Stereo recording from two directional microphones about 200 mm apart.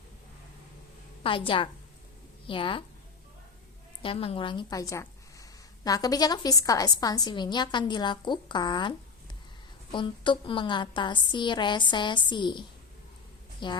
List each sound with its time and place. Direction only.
1.2 s a woman's voice: 25° left (ahead or behind)
4.0 s a woman's voice: 30° left (ahead or behind)